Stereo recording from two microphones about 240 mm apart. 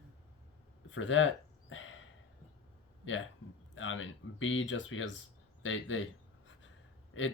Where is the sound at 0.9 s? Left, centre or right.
Left.